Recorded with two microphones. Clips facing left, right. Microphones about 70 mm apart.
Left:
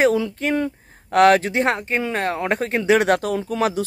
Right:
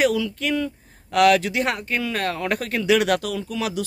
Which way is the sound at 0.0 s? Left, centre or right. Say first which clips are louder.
Left 3 dB; left.